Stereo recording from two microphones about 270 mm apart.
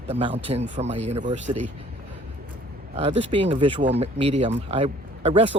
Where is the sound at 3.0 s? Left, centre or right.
Centre.